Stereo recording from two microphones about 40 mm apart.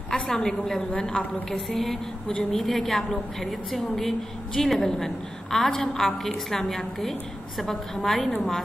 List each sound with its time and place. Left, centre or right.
0.1 s a woman's voice: centre
0.9 s a woman's voice: left
1.5 s a woman's voice: centre